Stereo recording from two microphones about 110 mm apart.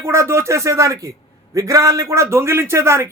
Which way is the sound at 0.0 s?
25° right (ahead or behind).